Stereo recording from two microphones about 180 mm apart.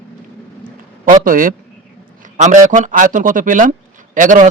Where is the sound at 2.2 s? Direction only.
45° right (ahead or behind).